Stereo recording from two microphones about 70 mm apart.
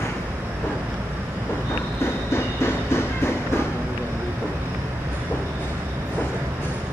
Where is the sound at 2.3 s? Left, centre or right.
Left.